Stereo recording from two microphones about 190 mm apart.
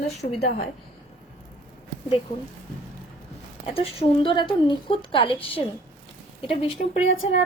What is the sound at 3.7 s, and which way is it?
A woman's voice, 25° left (ahead or behind).